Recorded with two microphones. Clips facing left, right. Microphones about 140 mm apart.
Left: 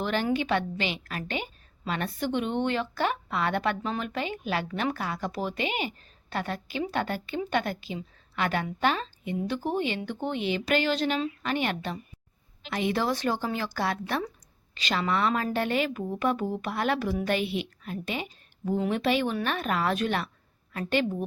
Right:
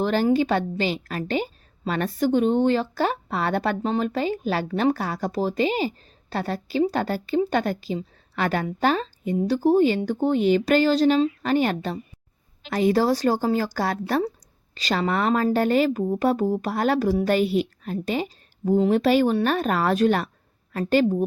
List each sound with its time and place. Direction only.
0.0 s a woman's voice: 35° right (ahead or behind)